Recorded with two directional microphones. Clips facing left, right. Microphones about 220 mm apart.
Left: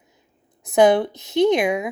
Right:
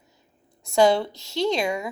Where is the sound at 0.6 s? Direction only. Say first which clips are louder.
Left 4 dB; 20° left (ahead or behind).